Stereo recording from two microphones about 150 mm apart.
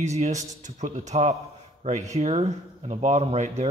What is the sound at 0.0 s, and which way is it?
Speech, 50° right (ahead or behind).